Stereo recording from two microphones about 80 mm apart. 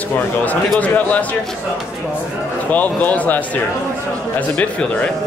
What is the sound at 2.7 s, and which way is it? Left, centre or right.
A man's voice, centre.